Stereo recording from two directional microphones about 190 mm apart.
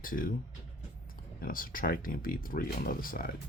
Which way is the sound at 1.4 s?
50° left (ahead or behind).